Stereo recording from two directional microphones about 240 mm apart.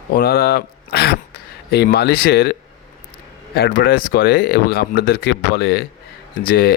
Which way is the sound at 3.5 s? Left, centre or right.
Left.